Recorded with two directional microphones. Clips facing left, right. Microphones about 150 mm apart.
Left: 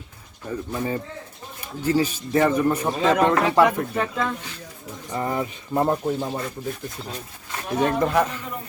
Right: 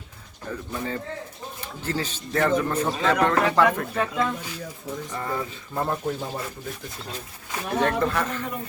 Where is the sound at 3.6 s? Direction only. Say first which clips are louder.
Left 2 dB; 5° left (ahead or behind).